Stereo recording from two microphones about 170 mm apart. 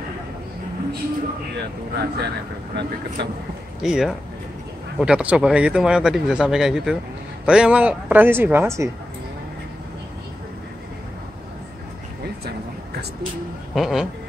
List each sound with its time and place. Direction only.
1.6 s speech: 75° right (ahead or behind)
3.8 s speech: centre (ahead or behind)
13.7 s speech: centre (ahead or behind)